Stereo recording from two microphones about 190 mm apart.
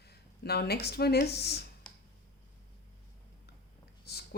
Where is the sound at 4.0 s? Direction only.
55° left (ahead or behind).